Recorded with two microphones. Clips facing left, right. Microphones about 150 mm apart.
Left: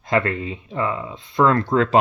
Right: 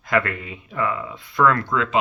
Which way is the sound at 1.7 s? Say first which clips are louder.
Left 5 dB; 40° left (ahead or behind).